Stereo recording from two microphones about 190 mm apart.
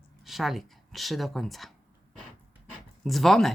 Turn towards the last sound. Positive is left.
turn(degrees=0)  # may be behind; listen again after turning